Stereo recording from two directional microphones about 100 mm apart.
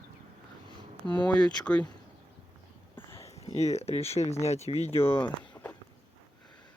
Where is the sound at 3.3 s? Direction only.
90° left.